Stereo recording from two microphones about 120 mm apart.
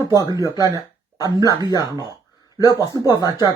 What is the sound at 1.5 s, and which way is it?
Speech, 35° left (ahead or behind).